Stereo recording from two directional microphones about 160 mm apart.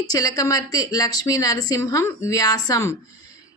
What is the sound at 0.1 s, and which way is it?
Speech, 20° left (ahead or behind).